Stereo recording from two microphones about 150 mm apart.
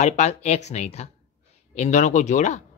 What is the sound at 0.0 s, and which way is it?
Speech, 50° left (ahead or behind).